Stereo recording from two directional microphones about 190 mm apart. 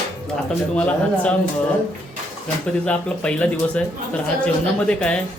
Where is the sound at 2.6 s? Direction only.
5° left (ahead or behind).